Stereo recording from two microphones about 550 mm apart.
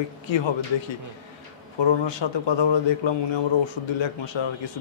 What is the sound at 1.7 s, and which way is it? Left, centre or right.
A man's voice, left.